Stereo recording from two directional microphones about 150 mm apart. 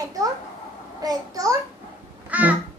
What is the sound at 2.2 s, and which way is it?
Babbling, 10° right (ahead or behind).